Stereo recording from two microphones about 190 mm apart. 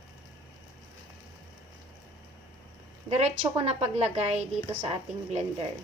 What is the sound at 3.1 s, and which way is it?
A woman's voice, 35° right (ahead or behind).